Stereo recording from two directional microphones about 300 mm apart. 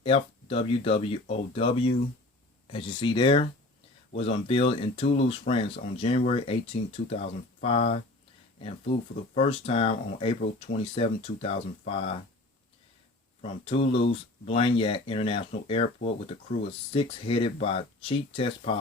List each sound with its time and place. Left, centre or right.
0.0 s speech: centre
13.4 s speech: centre